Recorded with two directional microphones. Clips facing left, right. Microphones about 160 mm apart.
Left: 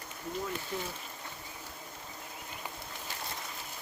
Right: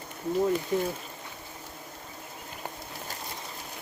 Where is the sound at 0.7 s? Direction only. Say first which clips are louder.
Right 10 dB; 15° right (ahead or behind).